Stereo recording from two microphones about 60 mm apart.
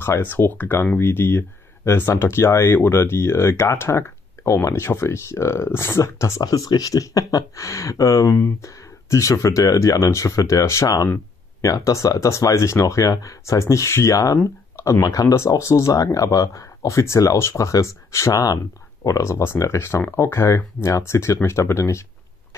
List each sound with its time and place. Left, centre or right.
0.0 s speech: left
6.4 s speech: left
15.3 s speech: left
19.3 s speech: left